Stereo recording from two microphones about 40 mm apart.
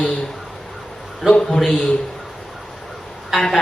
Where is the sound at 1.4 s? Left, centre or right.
Centre.